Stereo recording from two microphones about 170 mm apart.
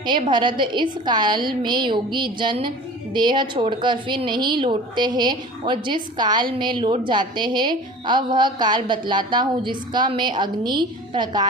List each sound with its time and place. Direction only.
0.0 s a woman's voice: 25° right (ahead or behind)